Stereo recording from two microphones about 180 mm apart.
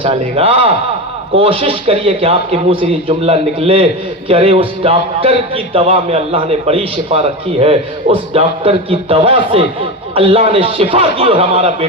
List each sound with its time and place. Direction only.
0.0 s a man's voice: 30° right (ahead or behind)